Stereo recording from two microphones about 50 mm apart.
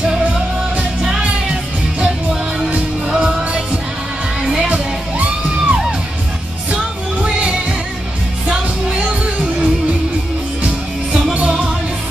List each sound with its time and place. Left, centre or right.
3.1 s music: centre
4.6 s music: right
7.2 s music: right
11.3 s music: right